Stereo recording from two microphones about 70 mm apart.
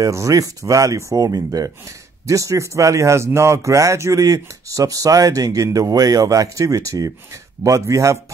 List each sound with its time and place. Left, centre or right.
0.0 s speech: right
2.2 s speech: right